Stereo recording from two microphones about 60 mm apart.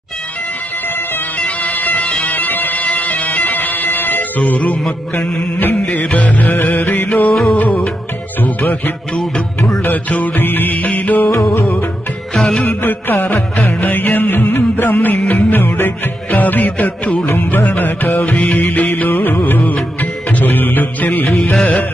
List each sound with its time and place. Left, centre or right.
1.4 s bagpipes: left
5.9 s music: left
7.2 s music: centre
7.5 s music: left
12.4 s music: centre
12.6 s music: left
21.3 s music: centre